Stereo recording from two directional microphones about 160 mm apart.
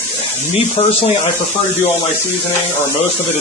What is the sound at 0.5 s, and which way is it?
Speech, 35° left (ahead or behind).